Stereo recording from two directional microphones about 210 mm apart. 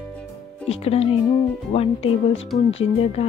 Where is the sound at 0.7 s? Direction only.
30° left (ahead or behind).